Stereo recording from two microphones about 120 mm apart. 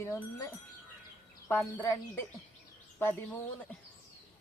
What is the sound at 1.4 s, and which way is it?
Speech, 20° left (ahead or behind).